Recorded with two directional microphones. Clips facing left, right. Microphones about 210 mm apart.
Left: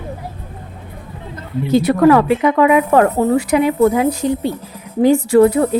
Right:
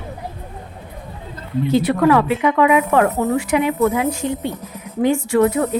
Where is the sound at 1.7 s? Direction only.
40° left (ahead or behind).